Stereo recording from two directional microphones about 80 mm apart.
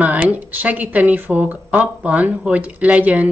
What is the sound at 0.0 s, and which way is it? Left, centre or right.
Speech, centre.